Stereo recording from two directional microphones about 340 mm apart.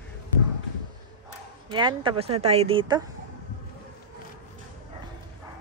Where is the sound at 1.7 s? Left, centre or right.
Centre.